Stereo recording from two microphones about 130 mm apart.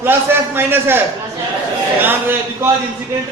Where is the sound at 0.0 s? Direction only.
15° right (ahead or behind).